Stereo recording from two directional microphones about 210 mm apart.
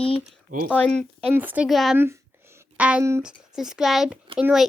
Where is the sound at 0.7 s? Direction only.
5° left (ahead or behind).